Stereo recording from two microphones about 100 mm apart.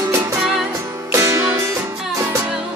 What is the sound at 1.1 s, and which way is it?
Music, 30° right (ahead or behind).